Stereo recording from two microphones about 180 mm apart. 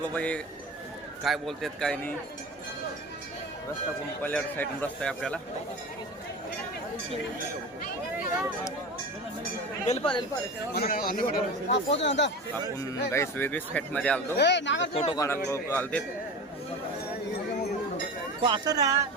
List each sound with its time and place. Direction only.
0.1 s a man's voice: 5° left (ahead or behind)
4.2 s speech: 10° left (ahead or behind)
9.8 s speech: 35° left (ahead or behind)
10.8 s a man's voice: 55° left (ahead or behind)
12.0 s a man's voice: 80° left
12.7 s speech: 20° left (ahead or behind)
14.3 s a man's voice: 75° left (ahead or behind); by 14.8 s 90° left
14.9 s speech: 30° left (ahead or behind)
15.2 s speech: 15° left (ahead or behind)
18.4 s speech: 25° right (ahead or behind)